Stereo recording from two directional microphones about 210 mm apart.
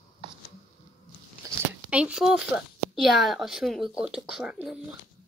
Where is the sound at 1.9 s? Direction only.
5° right (ahead or behind).